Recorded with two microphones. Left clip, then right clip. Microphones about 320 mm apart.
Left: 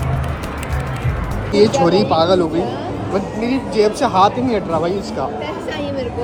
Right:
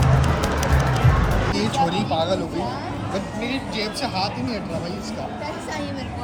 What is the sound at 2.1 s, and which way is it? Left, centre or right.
Speech, left.